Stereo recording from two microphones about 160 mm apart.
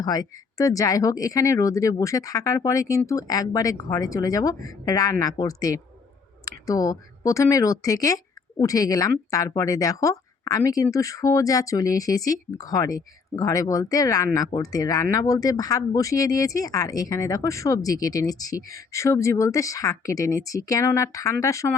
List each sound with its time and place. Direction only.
0.0 s speech: 25° left (ahead or behind)